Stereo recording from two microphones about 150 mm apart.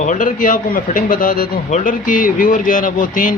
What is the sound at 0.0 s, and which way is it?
A man's voice, 55° left (ahead or behind).